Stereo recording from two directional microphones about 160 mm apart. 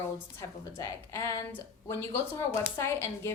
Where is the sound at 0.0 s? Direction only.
20° left (ahead or behind).